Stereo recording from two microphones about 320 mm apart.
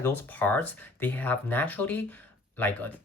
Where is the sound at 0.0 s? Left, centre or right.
Centre.